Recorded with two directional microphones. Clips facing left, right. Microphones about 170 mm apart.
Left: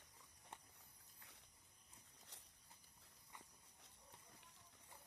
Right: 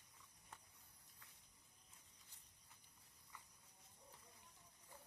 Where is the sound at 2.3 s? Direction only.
75° left (ahead or behind).